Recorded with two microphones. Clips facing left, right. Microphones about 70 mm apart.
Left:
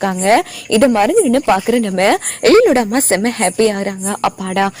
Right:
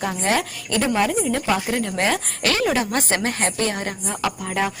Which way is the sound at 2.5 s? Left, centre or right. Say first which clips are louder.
Left 12 dB; left.